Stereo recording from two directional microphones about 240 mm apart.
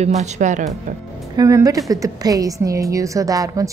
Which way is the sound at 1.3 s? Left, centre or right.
Centre.